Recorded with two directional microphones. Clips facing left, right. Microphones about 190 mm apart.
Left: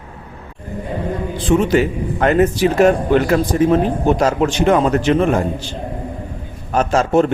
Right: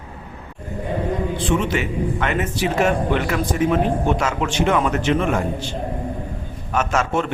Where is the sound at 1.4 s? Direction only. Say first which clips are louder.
Left 10 dB; 40° left (ahead or behind).